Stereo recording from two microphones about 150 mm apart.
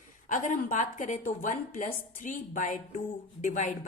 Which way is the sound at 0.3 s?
60° left (ahead or behind).